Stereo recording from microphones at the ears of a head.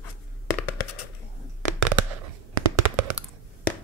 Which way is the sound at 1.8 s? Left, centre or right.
Right.